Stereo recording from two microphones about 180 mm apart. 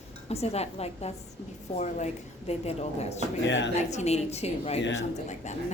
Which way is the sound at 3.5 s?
90° left.